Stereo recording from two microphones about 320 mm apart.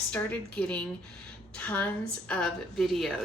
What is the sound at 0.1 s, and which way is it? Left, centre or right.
A woman's voice, centre.